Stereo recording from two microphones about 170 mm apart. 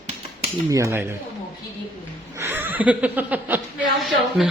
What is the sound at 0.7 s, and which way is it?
Speech, 15° right (ahead or behind).